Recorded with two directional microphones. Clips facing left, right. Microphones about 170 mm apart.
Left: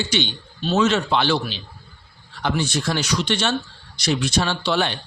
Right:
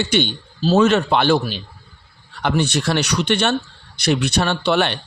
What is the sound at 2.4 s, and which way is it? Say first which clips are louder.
A man's voice: right 4 dB; 65° right (ahead or behind).